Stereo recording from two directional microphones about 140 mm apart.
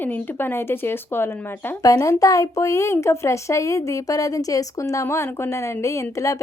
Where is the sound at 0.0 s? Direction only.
15° left (ahead or behind).